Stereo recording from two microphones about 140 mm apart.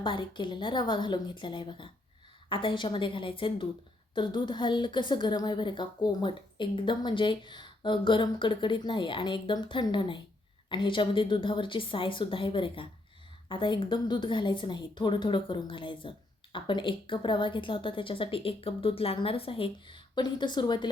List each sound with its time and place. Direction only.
0.0 s a woman's voice: 35° left (ahead or behind)